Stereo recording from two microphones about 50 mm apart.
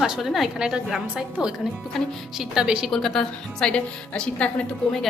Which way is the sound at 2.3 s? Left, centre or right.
Centre.